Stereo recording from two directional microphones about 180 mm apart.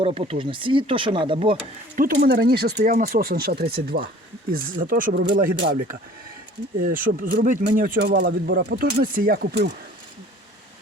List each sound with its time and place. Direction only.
0.0 s speech: 30° right (ahead or behind)
2.0 s speech: 55° right (ahead or behind); by 8.6 s 80° right
8.7 s speech: 55° right (ahead or behind)